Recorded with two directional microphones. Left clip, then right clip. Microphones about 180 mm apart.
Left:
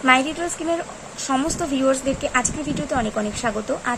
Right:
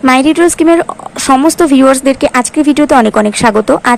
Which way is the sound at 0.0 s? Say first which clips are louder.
Right 11 dB; 35° right (ahead or behind).